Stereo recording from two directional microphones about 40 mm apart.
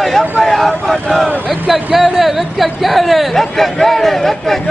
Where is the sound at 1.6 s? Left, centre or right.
Centre.